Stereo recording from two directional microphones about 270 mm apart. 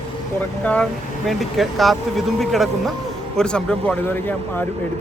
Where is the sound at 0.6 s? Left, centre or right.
Centre.